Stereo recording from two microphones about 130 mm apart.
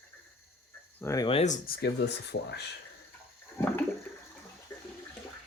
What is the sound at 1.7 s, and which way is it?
Speech, 90° left.